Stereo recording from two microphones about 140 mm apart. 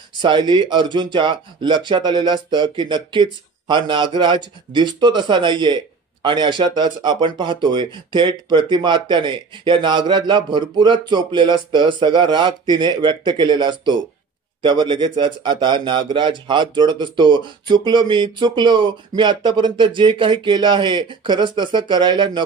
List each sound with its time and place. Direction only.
0.1 s a man's voice: 35° right (ahead or behind)